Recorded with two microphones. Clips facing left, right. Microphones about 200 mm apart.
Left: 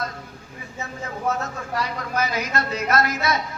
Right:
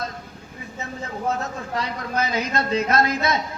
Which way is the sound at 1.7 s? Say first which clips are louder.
Even; 20° right (ahead or behind).